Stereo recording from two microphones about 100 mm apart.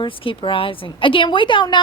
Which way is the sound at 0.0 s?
60° left (ahead or behind).